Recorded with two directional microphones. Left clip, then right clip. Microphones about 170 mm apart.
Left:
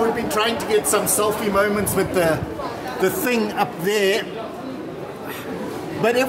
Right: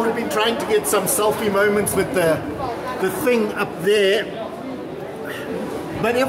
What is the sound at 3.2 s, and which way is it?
Speech, 35° left (ahead or behind).